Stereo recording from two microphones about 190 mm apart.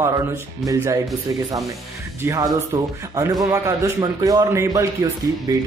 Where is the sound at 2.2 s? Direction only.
15° right (ahead or behind).